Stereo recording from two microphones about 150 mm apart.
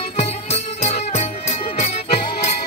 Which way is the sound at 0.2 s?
45° left (ahead or behind).